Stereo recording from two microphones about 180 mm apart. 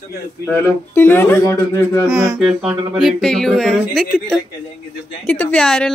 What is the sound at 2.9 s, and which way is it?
Speech, centre (ahead or behind).